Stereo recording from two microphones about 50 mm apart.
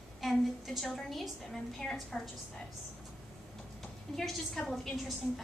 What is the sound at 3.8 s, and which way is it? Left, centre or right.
A woman's voice, centre.